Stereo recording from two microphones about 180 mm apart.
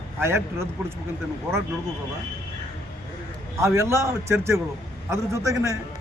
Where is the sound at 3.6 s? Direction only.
15° right (ahead or behind).